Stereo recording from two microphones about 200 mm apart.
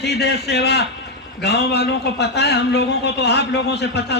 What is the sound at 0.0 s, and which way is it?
A man's voice, 55° left (ahead or behind).